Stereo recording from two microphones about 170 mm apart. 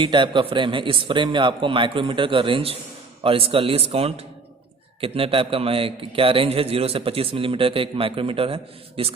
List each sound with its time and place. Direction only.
0.0 s a man's voice: 30° right (ahead or behind)